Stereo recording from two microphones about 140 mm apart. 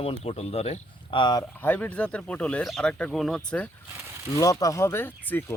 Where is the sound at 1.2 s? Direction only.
30° left (ahead or behind).